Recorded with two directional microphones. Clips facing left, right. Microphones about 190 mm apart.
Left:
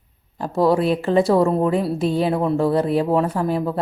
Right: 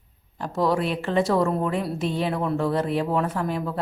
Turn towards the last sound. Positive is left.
turn(degrees=35)  # may be behind; listen again after turning